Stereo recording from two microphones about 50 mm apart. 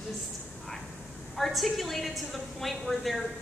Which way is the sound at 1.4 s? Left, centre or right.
Centre.